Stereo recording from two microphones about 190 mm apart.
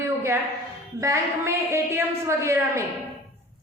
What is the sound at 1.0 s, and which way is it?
A man's voice, 15° right (ahead or behind).